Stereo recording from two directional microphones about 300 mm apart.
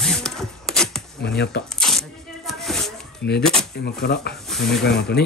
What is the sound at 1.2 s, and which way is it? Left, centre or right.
Speech, left.